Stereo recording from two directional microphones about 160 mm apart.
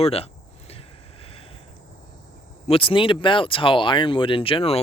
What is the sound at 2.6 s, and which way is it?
Speech, 35° left (ahead or behind).